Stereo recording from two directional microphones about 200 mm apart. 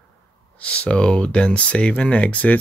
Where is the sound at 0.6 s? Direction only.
5° left (ahead or behind).